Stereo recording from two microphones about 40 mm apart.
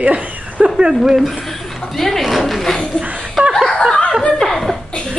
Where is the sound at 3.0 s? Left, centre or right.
Right.